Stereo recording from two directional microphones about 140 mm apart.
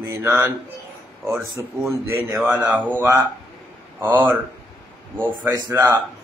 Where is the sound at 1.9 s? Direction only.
20° right (ahead or behind).